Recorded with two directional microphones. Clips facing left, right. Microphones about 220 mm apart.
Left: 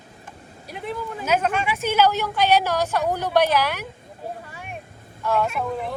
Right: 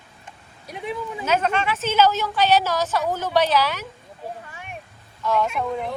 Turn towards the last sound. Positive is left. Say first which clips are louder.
# right 1 dB
turn(degrees=0)  # may be behind; listen again after turning